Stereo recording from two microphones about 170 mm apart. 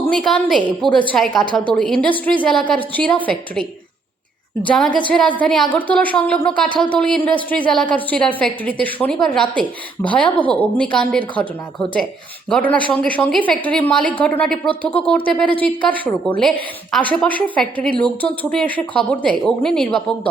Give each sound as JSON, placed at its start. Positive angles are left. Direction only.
{"t": 0.3, "sound": "a woman's voice", "side_deg": 5}
{"t": 4.6, "sound": "a woman's voice", "side_deg": 5}